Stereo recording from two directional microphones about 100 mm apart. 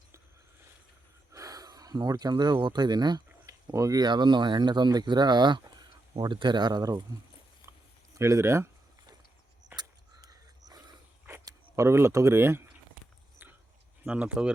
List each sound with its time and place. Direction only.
1.3 s snort: 35° right (ahead or behind)
2.6 s speech: 50° right (ahead or behind)
3.4 s speech: 30° right (ahead or behind)
8.1 s speech: 30° right (ahead or behind)
9.7 s a sound: 40° right (ahead or behind)
11.4 s speech: 30° right (ahead or behind)
14.1 s speech: 10° right (ahead or behind)